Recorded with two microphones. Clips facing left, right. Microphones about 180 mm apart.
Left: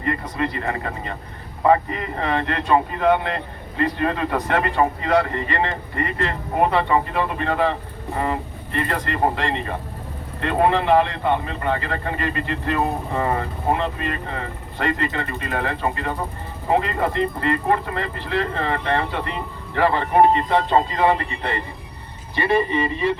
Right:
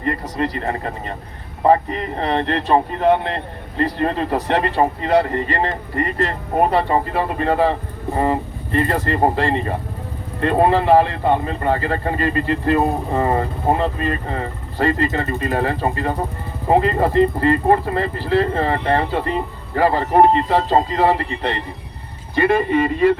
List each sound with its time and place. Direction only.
0.0 s speech: 35° right (ahead or behind)
22.4 s speech: 50° right (ahead or behind)